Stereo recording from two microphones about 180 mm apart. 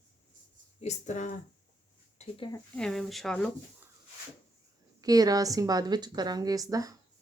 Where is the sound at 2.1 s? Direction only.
30° left (ahead or behind).